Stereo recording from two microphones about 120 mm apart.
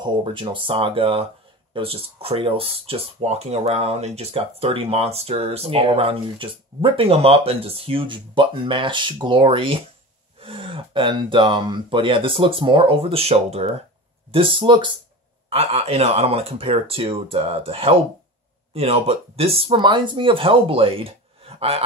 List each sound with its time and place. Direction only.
0.0 s speech: 45° right (ahead or behind); by 13.7 s 60° right (ahead or behind)
14.3 s speech: 45° right (ahead or behind)
15.5 s speech: 55° right (ahead or behind)
19.8 s speech: 40° right (ahead or behind)